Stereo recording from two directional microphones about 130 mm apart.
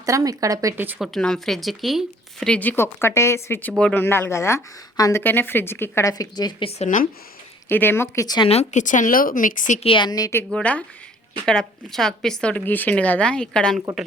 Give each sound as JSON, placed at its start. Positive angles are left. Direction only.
{"t": 0.0, "sound": "speech", "side_deg": -25}
{"t": 0.9, "sound": "speech", "side_deg": 0}
{"t": 6.7, "sound": "speech", "side_deg": 85}
{"t": 7.7, "sound": "speech", "side_deg": 15}
{"t": 8.4, "sound": "speech", "side_deg": 50}
{"t": 8.8, "sound": "speech", "side_deg": 80}
{"t": 9.8, "sound": "a woman's voice", "side_deg": 40}
{"t": 10.5, "sound": "speech", "side_deg": 10}